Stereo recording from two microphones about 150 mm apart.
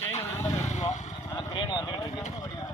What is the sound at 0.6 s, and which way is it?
Vehicle, 50° left (ahead or behind).